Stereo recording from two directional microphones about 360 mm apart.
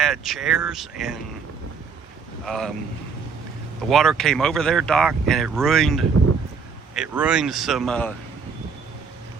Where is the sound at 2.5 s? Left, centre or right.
Centre.